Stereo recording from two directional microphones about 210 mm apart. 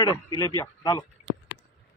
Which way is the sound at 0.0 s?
20° left (ahead or behind).